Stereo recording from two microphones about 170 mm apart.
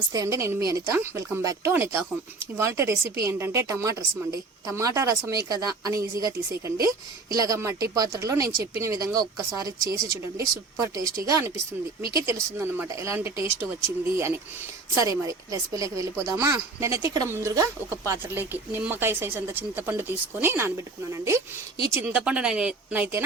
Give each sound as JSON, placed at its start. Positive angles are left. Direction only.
{"t": 0.1, "sound": "speech", "side_deg": -20}